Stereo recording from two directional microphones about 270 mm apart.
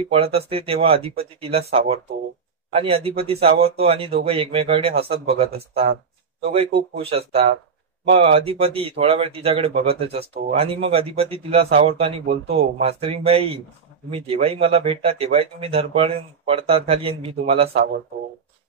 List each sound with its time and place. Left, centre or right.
0.1 s speech: right
7.0 s speech: right